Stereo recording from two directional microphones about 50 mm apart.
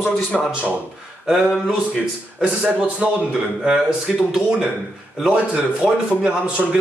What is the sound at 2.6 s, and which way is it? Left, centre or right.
Speech, right.